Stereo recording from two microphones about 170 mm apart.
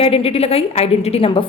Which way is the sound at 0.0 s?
35° left (ahead or behind).